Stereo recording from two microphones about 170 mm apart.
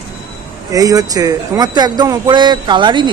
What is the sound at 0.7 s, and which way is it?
Speech, 20° right (ahead or behind).